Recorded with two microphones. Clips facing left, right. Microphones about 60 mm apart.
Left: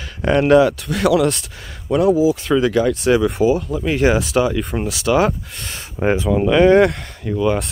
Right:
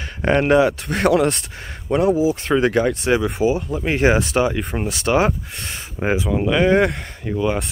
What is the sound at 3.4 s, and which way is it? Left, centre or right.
Speech, left.